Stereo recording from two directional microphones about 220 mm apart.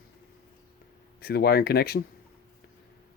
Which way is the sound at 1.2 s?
45° left (ahead or behind).